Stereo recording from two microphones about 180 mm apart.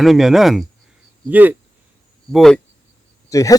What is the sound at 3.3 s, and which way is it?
Speech, 20° left (ahead or behind).